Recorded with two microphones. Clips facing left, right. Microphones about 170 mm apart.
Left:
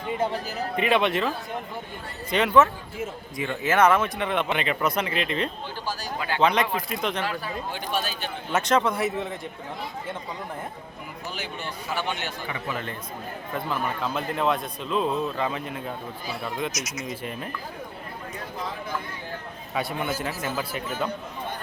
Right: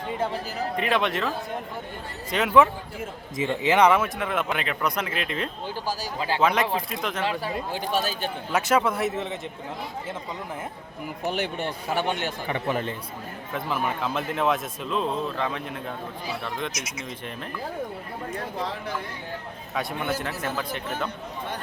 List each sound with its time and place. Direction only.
0.8 s a man's voice: centre (ahead or behind)
2.3 s a man's voice: centre (ahead or behind)
3.3 s a man's voice: 20° right (ahead or behind); by 5.5 s centre (ahead or behind)
6.1 s speech: 30° right (ahead or behind)
6.4 s a man's voice: 5° right (ahead or behind)
7.3 s speech: 30° right (ahead or behind)
8.5 s a man's voice: 5° right (ahead or behind)
11.3 s speech: 60° right (ahead or behind)
12.5 s speech: 35° right (ahead or behind)
13.5 s a man's voice: centre (ahead or behind)
19.7 s a man's voice: centre (ahead or behind)